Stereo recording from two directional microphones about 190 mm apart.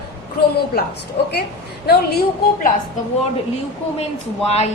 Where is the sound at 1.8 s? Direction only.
55° left (ahead or behind).